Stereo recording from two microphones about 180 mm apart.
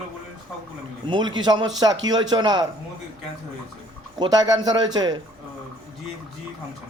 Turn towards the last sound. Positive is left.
turn(degrees=-25)  # may be behind; listen again after turning